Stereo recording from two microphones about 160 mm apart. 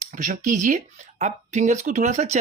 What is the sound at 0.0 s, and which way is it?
Speech, 55° right (ahead or behind).